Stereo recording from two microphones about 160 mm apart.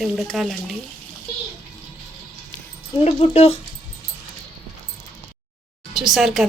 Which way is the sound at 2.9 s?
40° left (ahead or behind).